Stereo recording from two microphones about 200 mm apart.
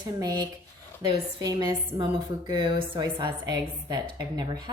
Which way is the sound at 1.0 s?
20° right (ahead or behind).